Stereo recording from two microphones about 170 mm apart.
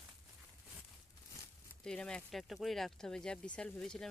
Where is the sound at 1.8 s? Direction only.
5° left (ahead or behind).